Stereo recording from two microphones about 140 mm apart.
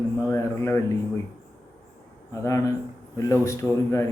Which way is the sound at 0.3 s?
20° left (ahead or behind).